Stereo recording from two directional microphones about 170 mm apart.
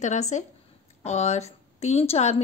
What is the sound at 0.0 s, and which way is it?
A woman's voice, 45° left (ahead or behind).